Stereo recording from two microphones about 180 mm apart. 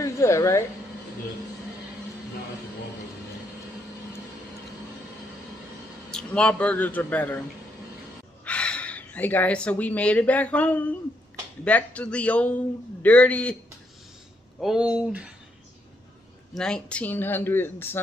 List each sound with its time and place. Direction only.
0.0 s speech: 15° left (ahead or behind)
6.1 s speech: 5° left (ahead or behind)
8.5 s speech: 5° left (ahead or behind)
14.6 s speech: 5° right (ahead or behind)
16.5 s speech: 5° left (ahead or behind)